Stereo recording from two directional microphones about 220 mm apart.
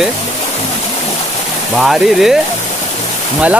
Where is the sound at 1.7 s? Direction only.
Centre (ahead or behind).